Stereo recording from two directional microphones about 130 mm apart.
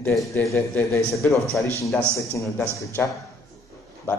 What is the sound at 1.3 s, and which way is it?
A man's voice, 25° left (ahead or behind).